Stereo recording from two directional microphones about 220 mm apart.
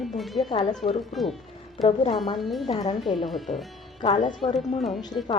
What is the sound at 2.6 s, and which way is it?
Speech, 25° left (ahead or behind).